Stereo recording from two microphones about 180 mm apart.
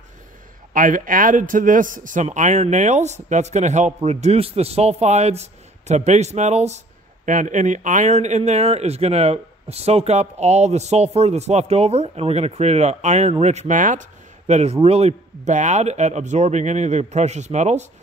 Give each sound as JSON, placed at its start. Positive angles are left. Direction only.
{"t": 0.7, "sound": "a man's voice", "side_deg": -50}